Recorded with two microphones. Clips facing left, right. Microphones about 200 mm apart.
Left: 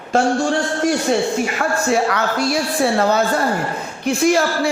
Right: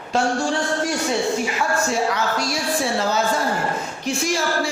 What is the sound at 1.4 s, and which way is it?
A woman's voice, 60° left (ahead or behind).